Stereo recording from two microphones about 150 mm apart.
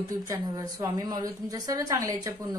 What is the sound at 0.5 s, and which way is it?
A woman's voice, 25° right (ahead or behind).